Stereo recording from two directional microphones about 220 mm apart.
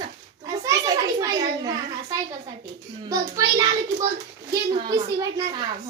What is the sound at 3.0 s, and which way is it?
A child's voice, 15° right (ahead or behind).